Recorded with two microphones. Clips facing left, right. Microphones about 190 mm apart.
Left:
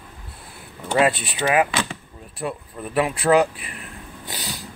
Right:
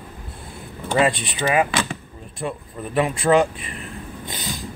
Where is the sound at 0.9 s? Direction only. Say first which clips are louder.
Even; 5° left (ahead or behind).